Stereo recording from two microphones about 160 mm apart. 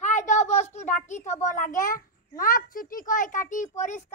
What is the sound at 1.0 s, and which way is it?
A child's voice, 50° left (ahead or behind).